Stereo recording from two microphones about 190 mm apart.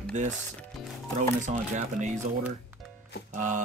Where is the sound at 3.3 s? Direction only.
40° right (ahead or behind).